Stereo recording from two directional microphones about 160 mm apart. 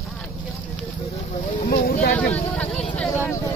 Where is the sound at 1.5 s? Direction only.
60° left (ahead or behind).